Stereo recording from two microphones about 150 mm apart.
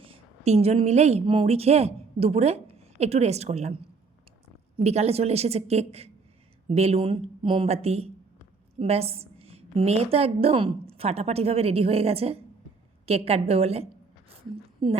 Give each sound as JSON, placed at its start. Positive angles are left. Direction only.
{"t": 0.0, "sound": "a woman's voice", "side_deg": -40}
{"t": 4.8, "sound": "a woman's voice", "side_deg": -45}
{"t": 14.3, "sound": "a sound", "side_deg": -35}